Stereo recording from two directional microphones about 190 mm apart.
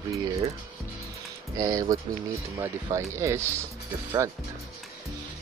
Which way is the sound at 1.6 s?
20° right (ahead or behind).